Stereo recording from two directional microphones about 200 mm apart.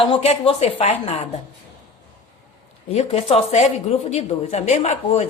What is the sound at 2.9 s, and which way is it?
Speech, 30° left (ahead or behind).